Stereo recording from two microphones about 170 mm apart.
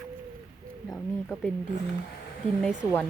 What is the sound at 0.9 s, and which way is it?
Speech, centre (ahead or behind).